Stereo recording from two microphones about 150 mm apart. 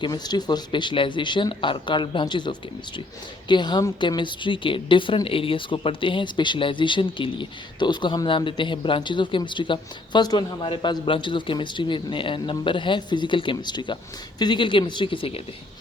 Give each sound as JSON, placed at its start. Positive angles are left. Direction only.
{"t": 0.0, "sound": "a woman's voice", "side_deg": 30}